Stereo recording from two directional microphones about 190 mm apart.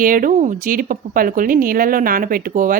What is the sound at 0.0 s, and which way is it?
A woman's voice, 45° right (ahead or behind).